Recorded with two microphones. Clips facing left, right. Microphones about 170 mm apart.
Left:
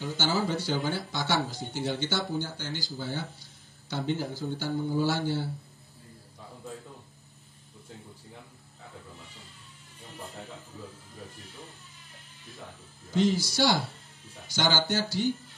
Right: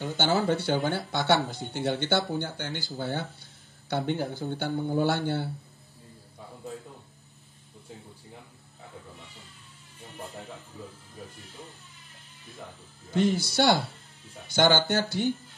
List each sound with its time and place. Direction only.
0.4 s speech: 60° right (ahead or behind)
13.1 s speech: 55° right (ahead or behind)